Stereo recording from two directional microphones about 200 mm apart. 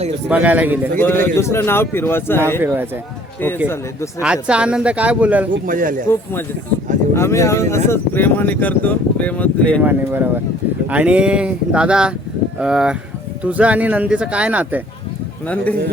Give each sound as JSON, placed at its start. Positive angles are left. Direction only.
{"t": 0.3, "sound": "speech", "side_deg": -10}
{"t": 0.9, "sound": "speech", "side_deg": 10}
{"t": 2.6, "sound": "speech", "side_deg": -10}
{"t": 4.2, "sound": "speech", "side_deg": -5}
{"t": 5.6, "sound": "a man's voice", "side_deg": -45}
{"t": 7.1, "sound": "speech", "side_deg": 15}
{"t": 9.8, "sound": "speech", "side_deg": -10}